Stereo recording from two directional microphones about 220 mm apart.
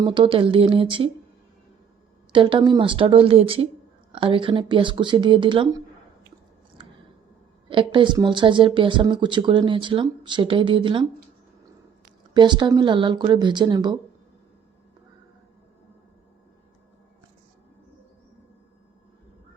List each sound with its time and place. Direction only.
0.0 s speech: 20° right (ahead or behind)
2.3 s speech: 20° right (ahead or behind)
7.7 s speech: 20° right (ahead or behind)
12.3 s speech: 20° right (ahead or behind)